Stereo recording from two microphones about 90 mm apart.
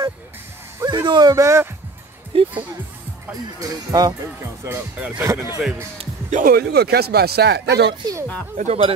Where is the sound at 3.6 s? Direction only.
45° right (ahead or behind).